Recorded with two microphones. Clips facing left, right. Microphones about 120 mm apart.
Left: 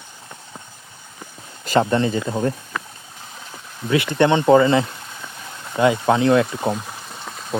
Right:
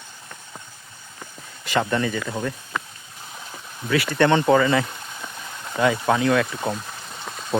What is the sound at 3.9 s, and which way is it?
Speech, 20° left (ahead or behind).